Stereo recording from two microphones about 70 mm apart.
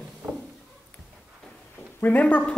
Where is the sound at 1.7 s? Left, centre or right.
Left.